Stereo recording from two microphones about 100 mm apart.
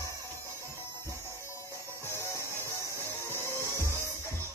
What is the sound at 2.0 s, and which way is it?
Music, 30° left (ahead or behind).